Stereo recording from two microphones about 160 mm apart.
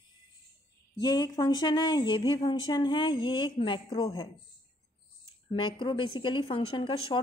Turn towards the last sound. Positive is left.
turn(degrees=35)  # may be behind; listen again after turning